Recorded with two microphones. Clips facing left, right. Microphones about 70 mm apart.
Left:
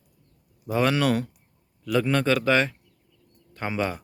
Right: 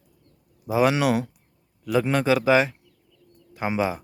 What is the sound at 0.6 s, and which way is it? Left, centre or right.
Speech, centre.